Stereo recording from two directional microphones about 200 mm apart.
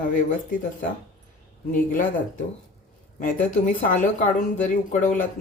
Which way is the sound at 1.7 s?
40° left (ahead or behind).